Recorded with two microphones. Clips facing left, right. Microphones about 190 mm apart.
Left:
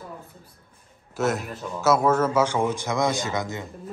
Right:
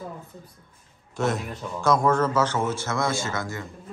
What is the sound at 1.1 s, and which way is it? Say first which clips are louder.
A man's voice: left 1 dB; centre (ahead or behind).